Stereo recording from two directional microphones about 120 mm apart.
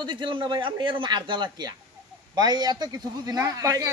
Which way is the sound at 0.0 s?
40° right (ahead or behind).